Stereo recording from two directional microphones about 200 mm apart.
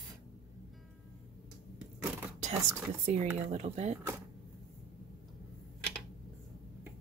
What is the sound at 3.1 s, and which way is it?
Speech, 35° right (ahead or behind).